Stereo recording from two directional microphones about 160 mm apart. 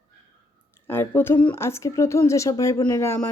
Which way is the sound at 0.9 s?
15° left (ahead or behind).